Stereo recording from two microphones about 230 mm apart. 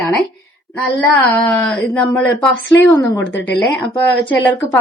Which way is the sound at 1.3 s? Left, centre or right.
Centre.